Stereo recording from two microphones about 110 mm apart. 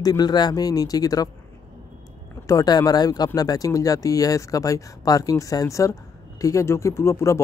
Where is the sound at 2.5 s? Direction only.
35° left (ahead or behind).